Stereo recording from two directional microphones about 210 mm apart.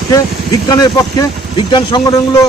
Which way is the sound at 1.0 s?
20° left (ahead or behind).